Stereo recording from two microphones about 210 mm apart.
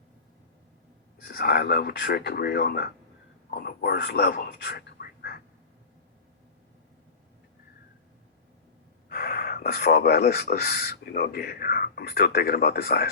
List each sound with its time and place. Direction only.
1.3 s speech: 45° left (ahead or behind)
9.0 s speech: 45° left (ahead or behind)